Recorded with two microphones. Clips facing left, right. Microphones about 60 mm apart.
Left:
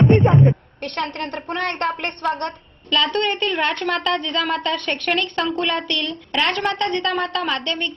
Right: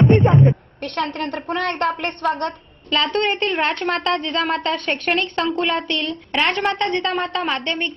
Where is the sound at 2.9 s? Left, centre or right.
Right.